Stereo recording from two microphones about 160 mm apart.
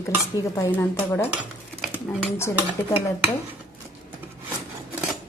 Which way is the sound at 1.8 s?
Centre (ahead or behind).